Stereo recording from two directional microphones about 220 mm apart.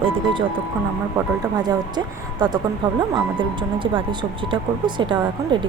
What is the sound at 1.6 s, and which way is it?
A woman's voice, 20° right (ahead or behind).